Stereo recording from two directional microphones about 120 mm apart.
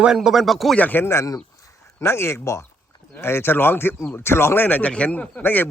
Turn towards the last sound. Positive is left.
turn(degrees=15)  # may be behind; listen again after turning